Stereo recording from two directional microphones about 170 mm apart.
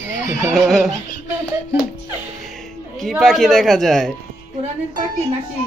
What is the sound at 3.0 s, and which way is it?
Speech, centre (ahead or behind).